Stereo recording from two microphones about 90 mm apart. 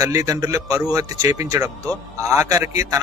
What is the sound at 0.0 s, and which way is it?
Speech, 35° right (ahead or behind).